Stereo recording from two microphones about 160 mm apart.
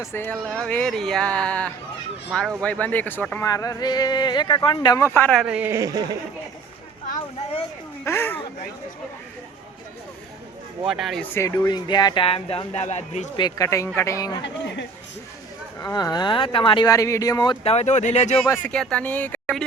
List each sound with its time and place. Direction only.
0.0 s speech: 15° left (ahead or behind)
3.4 s speech: 20° left (ahead or behind)
5.4 s a woman's voice: 5° right (ahead or behind); by 6.1 s 25° right (ahead or behind)
8.0 s a sound: 15° left (ahead or behind)
10.8 s speech: centre (ahead or behind)
11.3 s speech: 20° left (ahead or behind); by 13.3 s 45° left (ahead or behind)
13.3 s speech: 25° left (ahead or behind)
14.4 s speech: 90° left
15.8 s speech: 25° left (ahead or behind); by 18.3 s 45° left (ahead or behind)
18.4 s speech: 15° left (ahead or behind)
18.7 s speech: 5° left (ahead or behind)